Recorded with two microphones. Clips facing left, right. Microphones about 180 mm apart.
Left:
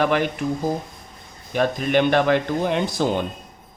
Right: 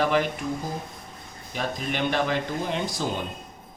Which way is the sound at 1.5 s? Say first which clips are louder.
Left 9 dB; 65° left (ahead or behind).